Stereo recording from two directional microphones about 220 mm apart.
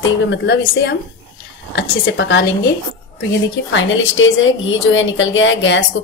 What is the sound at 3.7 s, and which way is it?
A woman's voice, 60° left (ahead or behind).